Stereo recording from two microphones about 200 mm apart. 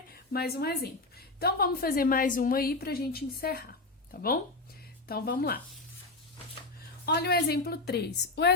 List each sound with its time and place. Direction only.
0.1 s a woman's voice: 50° left (ahead or behind)
7.0 s a woman's voice: 55° left (ahead or behind)